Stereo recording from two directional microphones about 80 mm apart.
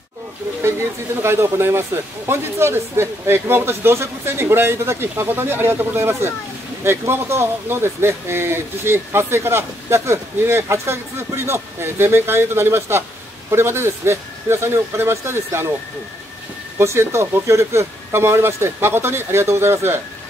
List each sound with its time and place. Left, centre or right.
0.6 s speech: right
16.7 s speech: right